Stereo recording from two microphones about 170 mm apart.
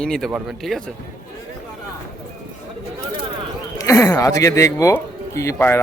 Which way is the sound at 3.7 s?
20° left (ahead or behind).